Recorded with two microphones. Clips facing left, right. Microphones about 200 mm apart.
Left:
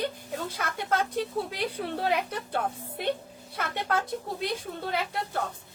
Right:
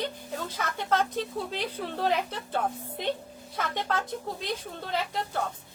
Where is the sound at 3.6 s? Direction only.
10° left (ahead or behind).